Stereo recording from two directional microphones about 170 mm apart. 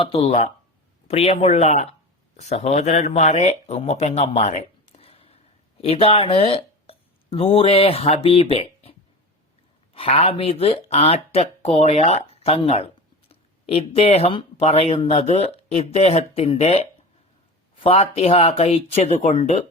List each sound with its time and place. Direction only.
0.0 s speech: 35° left (ahead or behind)